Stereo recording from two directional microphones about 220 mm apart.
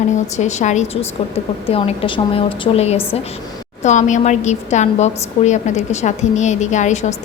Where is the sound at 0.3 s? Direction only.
30° left (ahead or behind).